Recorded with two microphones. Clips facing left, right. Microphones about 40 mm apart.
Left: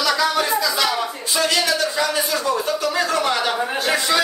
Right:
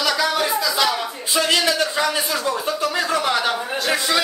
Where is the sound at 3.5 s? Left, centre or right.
Centre.